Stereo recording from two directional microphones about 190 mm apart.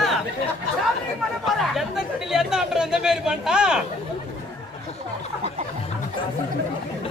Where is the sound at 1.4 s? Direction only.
Centre (ahead or behind).